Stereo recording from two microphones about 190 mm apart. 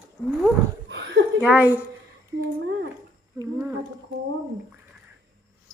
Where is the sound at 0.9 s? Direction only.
65° right (ahead or behind).